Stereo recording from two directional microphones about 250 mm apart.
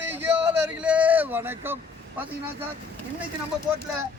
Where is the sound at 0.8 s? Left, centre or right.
Centre.